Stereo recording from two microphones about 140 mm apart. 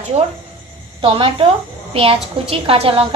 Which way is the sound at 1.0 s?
40° right (ahead or behind).